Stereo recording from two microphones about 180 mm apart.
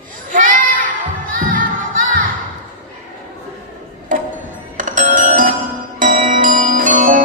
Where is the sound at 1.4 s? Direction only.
50° right (ahead or behind).